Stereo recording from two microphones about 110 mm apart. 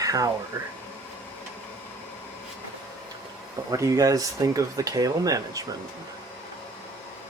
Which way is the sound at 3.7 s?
30° right (ahead or behind).